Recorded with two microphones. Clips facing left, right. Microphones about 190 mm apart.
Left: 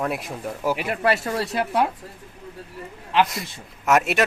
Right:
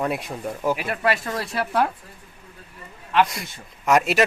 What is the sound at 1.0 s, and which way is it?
Speech, 25° left (ahead or behind).